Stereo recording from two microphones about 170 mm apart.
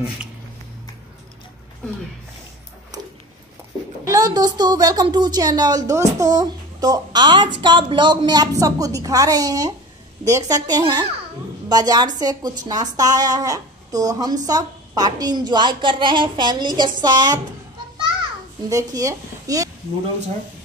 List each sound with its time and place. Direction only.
4.0 s speech: 20° right (ahead or behind)
18.7 s speech: 20° right (ahead or behind)